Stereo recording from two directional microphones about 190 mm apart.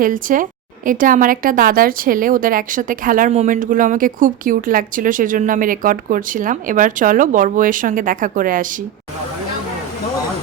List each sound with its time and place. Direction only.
0.0 s a woman's voice: 45° right (ahead or behind)